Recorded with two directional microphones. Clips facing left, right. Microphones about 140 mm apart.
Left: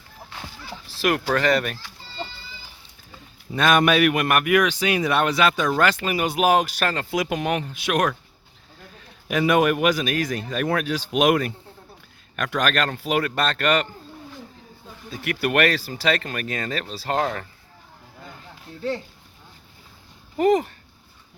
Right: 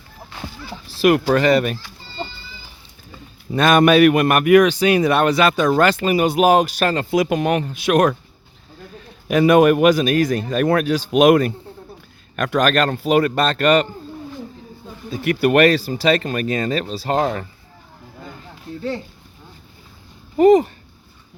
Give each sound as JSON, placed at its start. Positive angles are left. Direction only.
{"t": 0.9, "sound": "speech", "side_deg": -15}
{"t": 3.5, "sound": "speech", "side_deg": -40}
{"t": 7.3, "sound": "speech", "side_deg": -45}
{"t": 9.3, "sound": "speech", "side_deg": -40}
{"t": 15.1, "sound": "speech", "side_deg": -30}
{"t": 20.3, "sound": "speech", "side_deg": -25}